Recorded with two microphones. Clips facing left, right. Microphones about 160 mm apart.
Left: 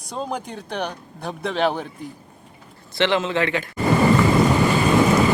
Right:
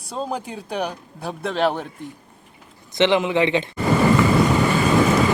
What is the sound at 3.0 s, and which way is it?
Speech, 15° right (ahead or behind).